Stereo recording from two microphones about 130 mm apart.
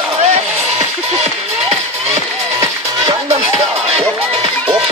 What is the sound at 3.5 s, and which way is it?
Music, 55° right (ahead or behind).